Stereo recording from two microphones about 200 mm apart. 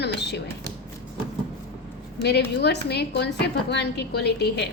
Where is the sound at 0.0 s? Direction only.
55° left (ahead or behind).